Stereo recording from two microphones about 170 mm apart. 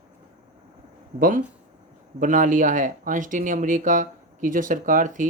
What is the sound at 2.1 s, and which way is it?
Speech, 50° right (ahead or behind).